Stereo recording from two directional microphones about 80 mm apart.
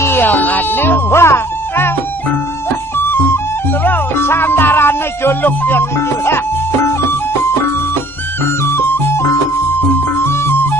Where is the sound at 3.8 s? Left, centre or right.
Left.